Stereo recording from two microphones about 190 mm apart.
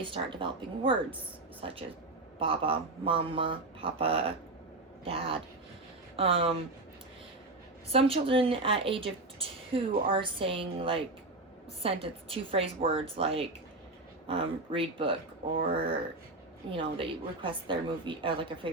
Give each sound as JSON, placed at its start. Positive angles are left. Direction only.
{"t": 0.1, "sound": "a woman's voice", "side_deg": -25}
{"t": 7.9, "sound": "a woman's voice", "side_deg": -30}
{"t": 16.6, "sound": "a woman's voice", "side_deg": -25}